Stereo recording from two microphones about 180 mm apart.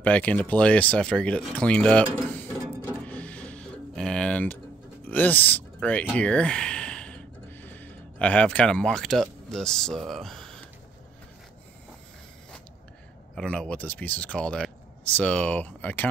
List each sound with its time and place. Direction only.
0.0 s speech: 5° left (ahead or behind)
2.8 s a sound: 10° left (ahead or behind)
5.0 s speech: 10° left (ahead or behind)
13.3 s speech: 5° left (ahead or behind)